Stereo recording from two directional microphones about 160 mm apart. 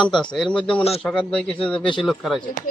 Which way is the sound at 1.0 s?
5° left (ahead or behind).